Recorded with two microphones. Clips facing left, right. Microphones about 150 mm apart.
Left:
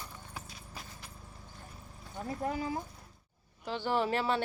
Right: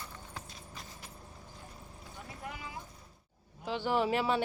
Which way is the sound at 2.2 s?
40° left (ahead or behind).